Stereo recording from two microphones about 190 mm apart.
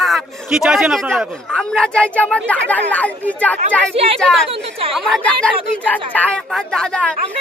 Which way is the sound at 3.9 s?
30° right (ahead or behind).